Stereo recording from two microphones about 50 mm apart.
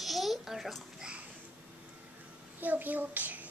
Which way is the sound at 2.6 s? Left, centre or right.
Right.